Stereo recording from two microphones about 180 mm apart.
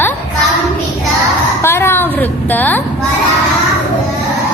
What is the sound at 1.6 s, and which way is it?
A child's voice, 15° left (ahead or behind).